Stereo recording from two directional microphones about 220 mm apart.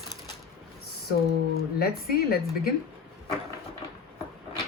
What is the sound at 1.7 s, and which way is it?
Speech, 45° left (ahead or behind).